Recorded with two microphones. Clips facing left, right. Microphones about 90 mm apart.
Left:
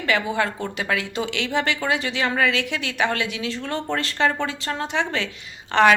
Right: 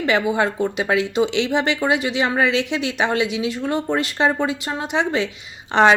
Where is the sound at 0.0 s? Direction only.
20° right (ahead or behind).